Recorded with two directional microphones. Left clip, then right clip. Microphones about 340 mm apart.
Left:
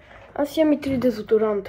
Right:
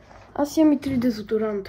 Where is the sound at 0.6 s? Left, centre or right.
Centre.